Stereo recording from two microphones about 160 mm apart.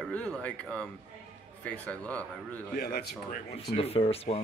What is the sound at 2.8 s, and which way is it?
Speech, 75° left (ahead or behind).